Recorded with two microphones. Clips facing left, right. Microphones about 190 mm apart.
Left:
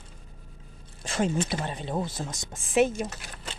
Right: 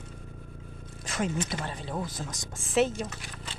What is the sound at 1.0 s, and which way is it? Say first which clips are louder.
Speech: left 4 dB; 30° left (ahead or behind).